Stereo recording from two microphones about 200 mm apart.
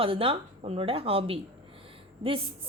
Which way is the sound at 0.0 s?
30° right (ahead or behind).